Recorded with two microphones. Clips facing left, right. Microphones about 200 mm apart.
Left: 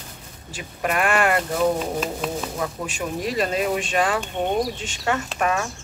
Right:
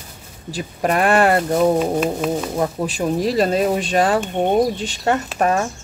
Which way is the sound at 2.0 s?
5° right (ahead or behind).